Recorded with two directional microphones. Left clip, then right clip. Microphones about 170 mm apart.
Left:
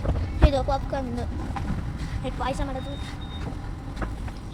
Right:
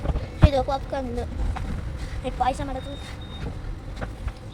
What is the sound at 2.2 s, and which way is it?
Speech, 30° right (ahead or behind).